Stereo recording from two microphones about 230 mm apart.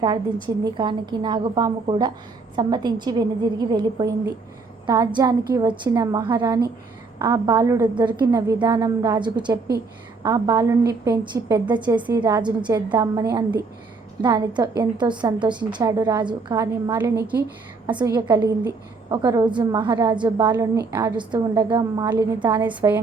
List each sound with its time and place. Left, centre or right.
0.4 s a woman's voice: centre